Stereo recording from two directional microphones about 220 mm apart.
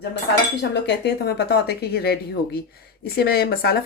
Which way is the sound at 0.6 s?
50° left (ahead or behind).